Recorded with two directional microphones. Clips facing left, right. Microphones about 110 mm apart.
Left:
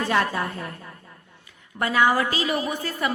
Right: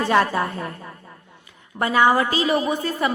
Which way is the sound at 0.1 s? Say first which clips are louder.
Right 6 dB; 40° right (ahead or behind).